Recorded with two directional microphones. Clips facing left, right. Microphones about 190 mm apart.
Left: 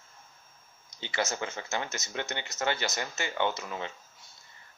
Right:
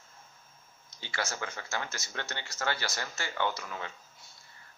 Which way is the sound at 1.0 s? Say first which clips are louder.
Left 4 dB; 20° left (ahead or behind).